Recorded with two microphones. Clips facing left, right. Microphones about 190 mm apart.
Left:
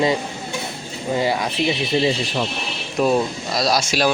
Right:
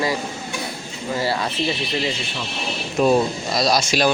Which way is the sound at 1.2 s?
15° left (ahead or behind).